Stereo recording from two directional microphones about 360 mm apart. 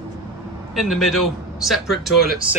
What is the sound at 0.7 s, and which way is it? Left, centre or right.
A man's voice, centre.